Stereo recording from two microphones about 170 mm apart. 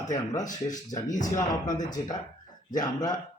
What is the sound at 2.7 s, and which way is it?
Speech, 25° left (ahead or behind).